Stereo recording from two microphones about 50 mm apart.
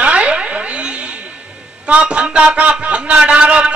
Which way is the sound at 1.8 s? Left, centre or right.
Right.